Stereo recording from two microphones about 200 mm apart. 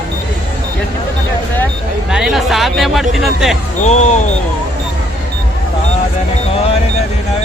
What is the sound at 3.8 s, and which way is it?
Speech, 35° left (ahead or behind).